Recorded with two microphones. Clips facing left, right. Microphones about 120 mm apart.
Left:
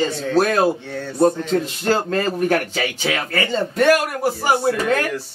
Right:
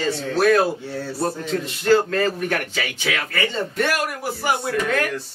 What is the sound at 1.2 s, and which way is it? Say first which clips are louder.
A man's voice: left 9 dB; 35° left (ahead or behind).